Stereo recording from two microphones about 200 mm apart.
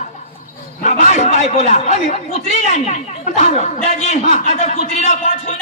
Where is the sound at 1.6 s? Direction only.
35° left (ahead or behind).